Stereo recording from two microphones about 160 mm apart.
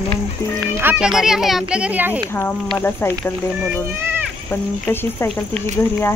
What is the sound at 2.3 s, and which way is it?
Speech, 15° left (ahead or behind).